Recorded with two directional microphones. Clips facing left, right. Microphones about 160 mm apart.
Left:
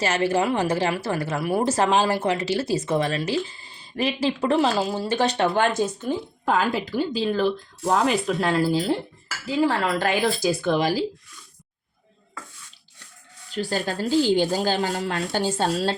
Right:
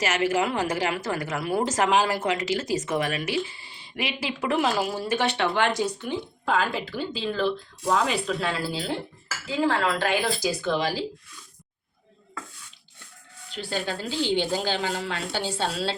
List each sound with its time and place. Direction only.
0.0 s speech: 35° left (ahead or behind)
13.5 s speech: 40° left (ahead or behind)